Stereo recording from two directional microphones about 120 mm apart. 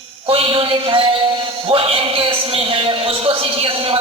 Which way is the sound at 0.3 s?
50° right (ahead or behind).